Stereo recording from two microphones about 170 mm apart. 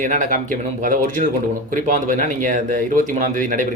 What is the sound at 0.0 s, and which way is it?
Speech, 50° right (ahead or behind).